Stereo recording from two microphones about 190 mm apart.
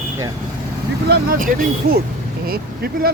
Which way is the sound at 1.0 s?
55° right (ahead or behind).